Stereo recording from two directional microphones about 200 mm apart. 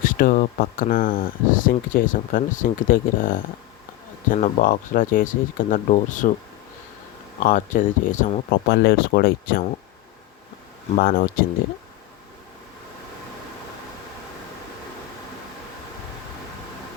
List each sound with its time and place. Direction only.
0.0 s speech: 45° left (ahead or behind)
7.3 s speech: 40° left (ahead or behind)
11.0 s speech: 45° left (ahead or behind)